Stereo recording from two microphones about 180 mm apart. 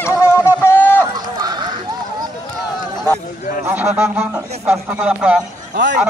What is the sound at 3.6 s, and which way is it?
Speech, 10° right (ahead or behind).